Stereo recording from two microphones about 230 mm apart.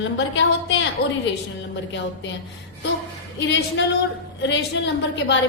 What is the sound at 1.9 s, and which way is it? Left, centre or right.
Speech, left.